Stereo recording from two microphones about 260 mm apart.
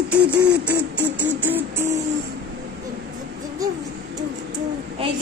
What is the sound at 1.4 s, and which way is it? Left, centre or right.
Music, centre.